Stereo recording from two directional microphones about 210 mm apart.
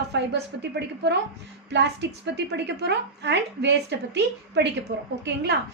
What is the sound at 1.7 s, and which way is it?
A woman's voice, 55° right (ahead or behind).